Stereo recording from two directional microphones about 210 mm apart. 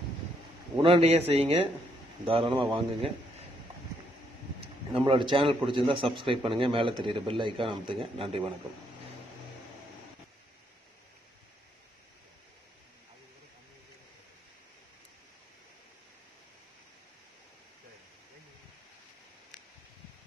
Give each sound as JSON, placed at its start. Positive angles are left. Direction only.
{"t": 0.8, "sound": "a man's voice", "side_deg": -30}
{"t": 4.6, "sound": "a man's voice", "side_deg": -25}